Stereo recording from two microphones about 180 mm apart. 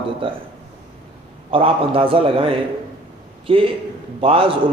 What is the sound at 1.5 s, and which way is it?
A man's voice, 30° right (ahead or behind).